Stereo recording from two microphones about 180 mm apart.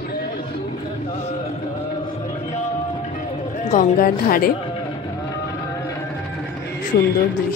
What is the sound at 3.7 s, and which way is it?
Speech, 50° left (ahead or behind).